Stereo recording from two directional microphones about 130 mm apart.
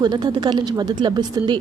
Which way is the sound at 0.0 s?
30° right (ahead or behind).